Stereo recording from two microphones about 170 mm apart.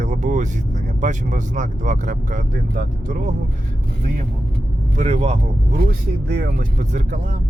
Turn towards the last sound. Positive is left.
turn(degrees=-45)  # may be behind; listen again after turning